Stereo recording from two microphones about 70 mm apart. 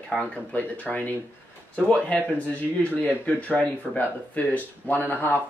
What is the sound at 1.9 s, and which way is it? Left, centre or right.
Speech, centre.